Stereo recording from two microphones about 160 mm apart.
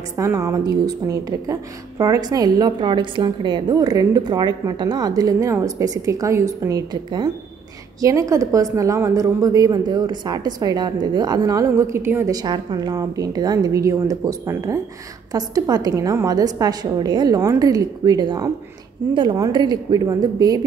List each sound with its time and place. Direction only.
0.2 s a woman's voice: 20° right (ahead or behind)